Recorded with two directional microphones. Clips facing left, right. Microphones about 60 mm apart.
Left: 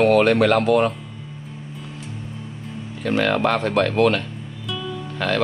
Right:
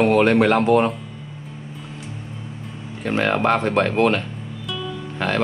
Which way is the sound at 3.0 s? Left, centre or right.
Right.